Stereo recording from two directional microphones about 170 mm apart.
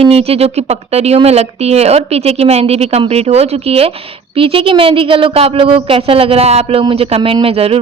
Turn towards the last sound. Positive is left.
turn(degrees=-35)  # may be behind; listen again after turning